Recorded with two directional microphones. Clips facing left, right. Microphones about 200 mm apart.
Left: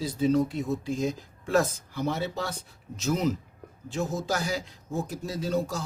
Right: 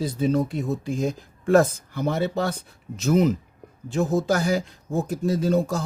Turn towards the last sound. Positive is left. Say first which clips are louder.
# right 7 dB
turn(degrees=-50)  # may be behind; listen again after turning